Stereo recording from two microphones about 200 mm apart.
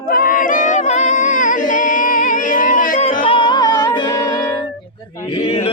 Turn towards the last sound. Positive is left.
turn(degrees=30)  # may be behind; listen again after turning